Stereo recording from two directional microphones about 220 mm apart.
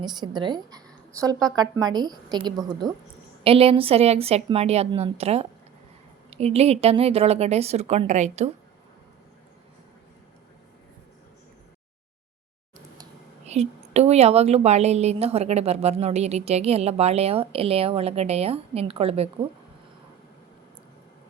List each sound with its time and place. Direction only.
0.0 s a woman's voice: 20° right (ahead or behind)
13.5 s a woman's voice: 30° right (ahead or behind)